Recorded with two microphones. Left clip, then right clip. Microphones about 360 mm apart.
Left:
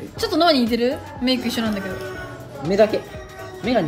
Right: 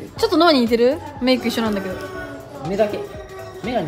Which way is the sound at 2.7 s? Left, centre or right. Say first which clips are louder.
Left 3 dB; left.